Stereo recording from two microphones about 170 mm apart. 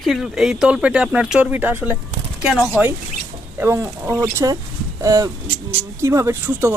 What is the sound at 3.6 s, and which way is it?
Speech, 15° right (ahead or behind).